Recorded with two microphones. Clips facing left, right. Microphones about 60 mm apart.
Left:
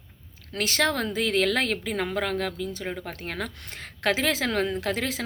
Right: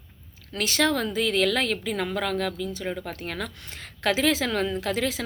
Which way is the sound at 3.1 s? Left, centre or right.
Left.